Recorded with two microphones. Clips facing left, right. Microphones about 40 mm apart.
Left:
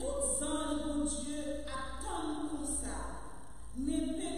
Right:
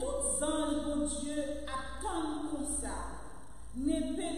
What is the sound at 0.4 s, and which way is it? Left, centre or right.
Music, centre.